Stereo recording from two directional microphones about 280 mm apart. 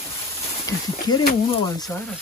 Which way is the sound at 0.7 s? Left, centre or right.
Centre.